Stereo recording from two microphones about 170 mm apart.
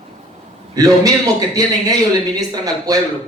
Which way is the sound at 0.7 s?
20° right (ahead or behind).